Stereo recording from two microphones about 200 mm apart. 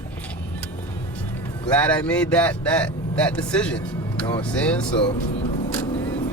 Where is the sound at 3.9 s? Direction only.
20° left (ahead or behind).